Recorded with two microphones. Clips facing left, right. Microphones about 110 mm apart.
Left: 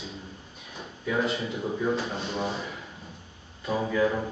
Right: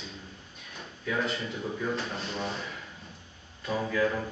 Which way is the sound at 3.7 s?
20° left (ahead or behind).